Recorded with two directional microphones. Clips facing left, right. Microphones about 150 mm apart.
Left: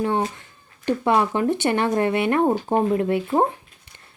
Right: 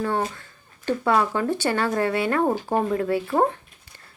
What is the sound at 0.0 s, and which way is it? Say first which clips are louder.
Speech: left 2 dB; 20° left (ahead or behind).